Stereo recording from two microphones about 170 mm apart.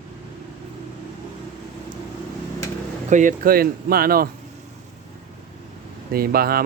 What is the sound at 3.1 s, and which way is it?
Speech, 50° right (ahead or behind).